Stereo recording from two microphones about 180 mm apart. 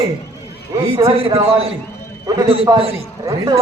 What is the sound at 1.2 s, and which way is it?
A man's voice, 30° right (ahead or behind).